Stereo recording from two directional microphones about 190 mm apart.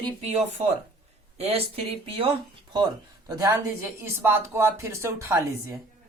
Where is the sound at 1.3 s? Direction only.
30° right (ahead or behind).